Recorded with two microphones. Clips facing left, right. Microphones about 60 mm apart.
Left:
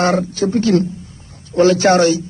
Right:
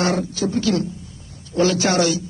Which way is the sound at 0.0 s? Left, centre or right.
Left.